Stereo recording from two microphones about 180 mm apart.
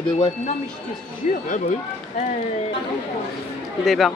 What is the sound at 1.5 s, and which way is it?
Speech, 40° left (ahead or behind).